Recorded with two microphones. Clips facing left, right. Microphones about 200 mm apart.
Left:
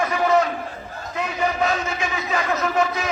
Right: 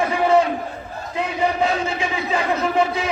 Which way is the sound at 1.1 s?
30° right (ahead or behind).